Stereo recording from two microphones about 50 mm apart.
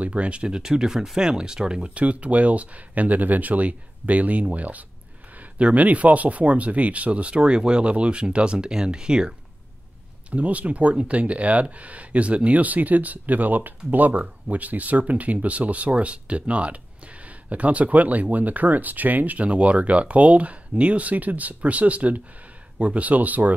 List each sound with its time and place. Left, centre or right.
0.0 s speech: right
10.3 s speech: right